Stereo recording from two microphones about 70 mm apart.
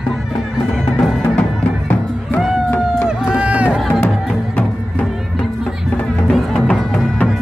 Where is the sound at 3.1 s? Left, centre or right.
Centre.